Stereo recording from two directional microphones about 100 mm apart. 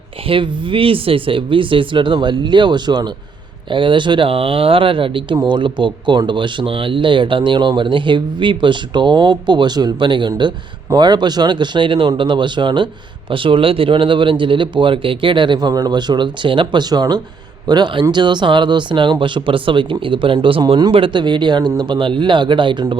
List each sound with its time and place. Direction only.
0.3 s a man's voice: 60° right (ahead or behind)
16.9 s a man's voice: 45° right (ahead or behind)